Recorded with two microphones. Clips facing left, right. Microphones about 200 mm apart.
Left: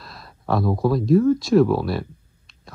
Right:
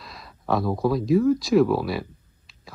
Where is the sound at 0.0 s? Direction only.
Centre (ahead or behind).